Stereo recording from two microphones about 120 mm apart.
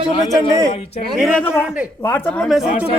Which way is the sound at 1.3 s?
10° left (ahead or behind).